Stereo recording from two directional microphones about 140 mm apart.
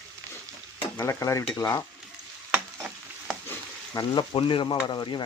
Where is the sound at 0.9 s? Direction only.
20° left (ahead or behind).